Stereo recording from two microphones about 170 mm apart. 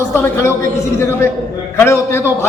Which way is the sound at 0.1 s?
15° left (ahead or behind).